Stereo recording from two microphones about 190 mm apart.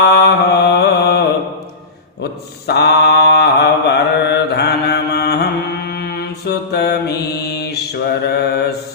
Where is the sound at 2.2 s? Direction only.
60° left (ahead or behind).